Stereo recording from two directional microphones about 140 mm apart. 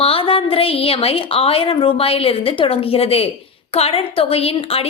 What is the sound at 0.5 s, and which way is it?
A woman's voice, 40° left (ahead or behind).